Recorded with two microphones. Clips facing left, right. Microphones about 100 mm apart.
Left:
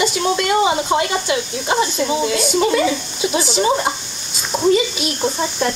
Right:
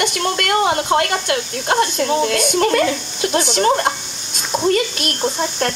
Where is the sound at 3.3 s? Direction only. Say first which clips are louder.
Right 1 dB; 60° right (ahead or behind).